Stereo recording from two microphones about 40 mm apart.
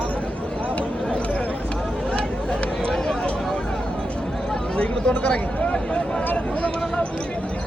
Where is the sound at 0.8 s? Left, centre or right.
Left.